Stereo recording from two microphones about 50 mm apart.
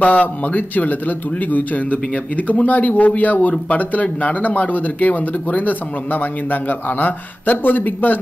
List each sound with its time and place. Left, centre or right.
0.0 s a man's voice: left